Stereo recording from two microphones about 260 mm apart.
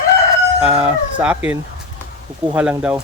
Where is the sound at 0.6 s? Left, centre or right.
Centre.